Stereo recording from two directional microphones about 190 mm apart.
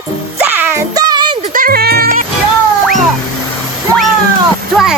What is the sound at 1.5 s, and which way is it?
Music, 50° right (ahead or behind).